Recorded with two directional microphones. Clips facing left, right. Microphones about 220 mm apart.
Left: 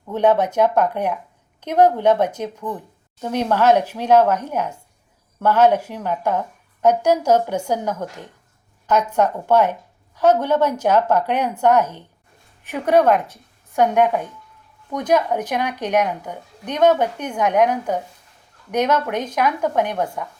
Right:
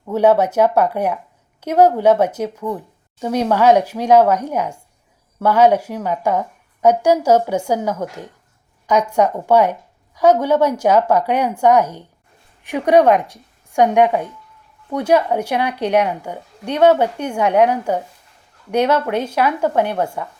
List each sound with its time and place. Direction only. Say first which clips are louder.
0.1 s a woman's voice: right 3 dB; 10° right (ahead or behind)